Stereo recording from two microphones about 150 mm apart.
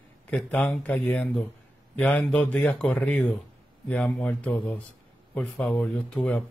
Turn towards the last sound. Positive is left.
turn(degrees=5)  # may be behind; listen again after turning